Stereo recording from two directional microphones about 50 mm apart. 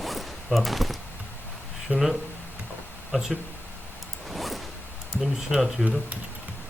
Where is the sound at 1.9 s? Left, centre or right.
Right.